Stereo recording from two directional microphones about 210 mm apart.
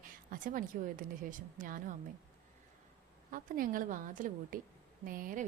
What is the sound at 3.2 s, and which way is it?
A woman's voice, 40° right (ahead or behind).